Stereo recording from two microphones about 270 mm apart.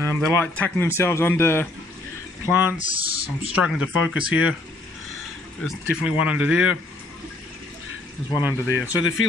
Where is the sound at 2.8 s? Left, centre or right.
Centre.